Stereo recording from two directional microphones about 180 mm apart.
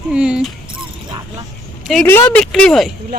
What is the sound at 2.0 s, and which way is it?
Speech, 10° left (ahead or behind).